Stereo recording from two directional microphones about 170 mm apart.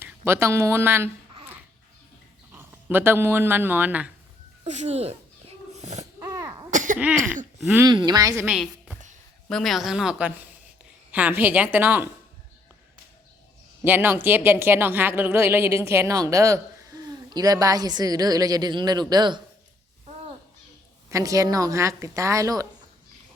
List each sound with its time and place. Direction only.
0.0 s speech: 15° right (ahead or behind)
2.5 s speech: 10° right (ahead or behind)
4.6 s speech: 45° right (ahead or behind)
5.7 s a sound: 40° right (ahead or behind)
6.2 s cough: 20° right (ahead or behind)
6.7 s cough: 50° right (ahead or behind)
7.9 s speech: 25° right (ahead or behind)
8.4 s a woman's voice: 5° right (ahead or behind)
13.8 s speech: 10° right (ahead or behind)
21.1 s speech: 20° right (ahead or behind)